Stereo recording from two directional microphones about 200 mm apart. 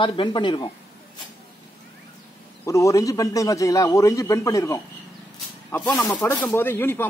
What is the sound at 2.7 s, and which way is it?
Speech, 15° left (ahead or behind).